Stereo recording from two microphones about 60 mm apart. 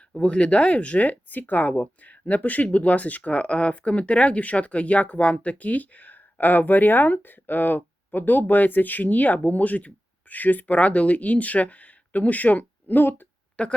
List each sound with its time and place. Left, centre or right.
0.2 s speech: centre
13.6 s speech: left